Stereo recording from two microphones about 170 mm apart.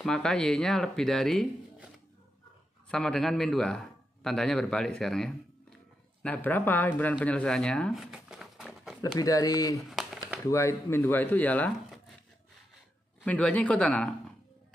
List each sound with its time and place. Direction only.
0.0 s speech: 5° left (ahead or behind)
2.9 s a man's voice: 5° left (ahead or behind)
9.0 s speech: 20° left (ahead or behind)
9.8 s crumpling: centre (ahead or behind)
10.4 s speech: 15° left (ahead or behind)
13.2 s speech: 10° left (ahead or behind)